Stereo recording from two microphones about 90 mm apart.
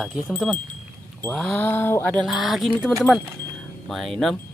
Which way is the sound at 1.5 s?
20° left (ahead or behind).